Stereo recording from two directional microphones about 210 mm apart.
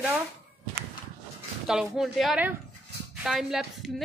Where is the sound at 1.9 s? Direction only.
Centre (ahead or behind).